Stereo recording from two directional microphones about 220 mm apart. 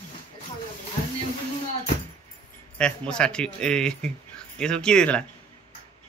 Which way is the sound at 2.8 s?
5° left (ahead or behind).